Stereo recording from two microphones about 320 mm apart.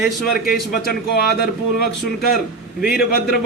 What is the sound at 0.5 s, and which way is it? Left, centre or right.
A man's voice, left.